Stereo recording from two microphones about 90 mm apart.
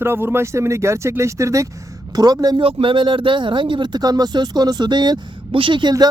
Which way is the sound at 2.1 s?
45° right (ahead or behind).